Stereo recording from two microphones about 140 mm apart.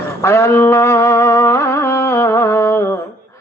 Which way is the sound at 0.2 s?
20° left (ahead or behind).